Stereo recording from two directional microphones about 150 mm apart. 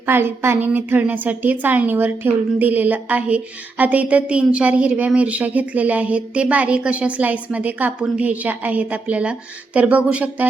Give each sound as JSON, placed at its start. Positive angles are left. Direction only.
{"t": 0.0, "sound": "a woman's voice", "side_deg": -15}